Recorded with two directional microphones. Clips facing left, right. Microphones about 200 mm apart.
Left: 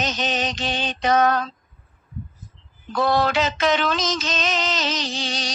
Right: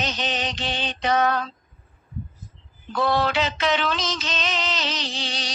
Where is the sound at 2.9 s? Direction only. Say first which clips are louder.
Left 2 dB; 45° left (ahead or behind).